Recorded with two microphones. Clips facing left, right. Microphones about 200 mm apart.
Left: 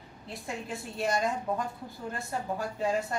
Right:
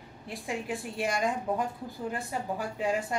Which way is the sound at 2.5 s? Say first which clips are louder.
Even; 10° right (ahead or behind).